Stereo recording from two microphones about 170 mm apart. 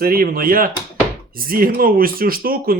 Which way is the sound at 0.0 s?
60° right (ahead or behind).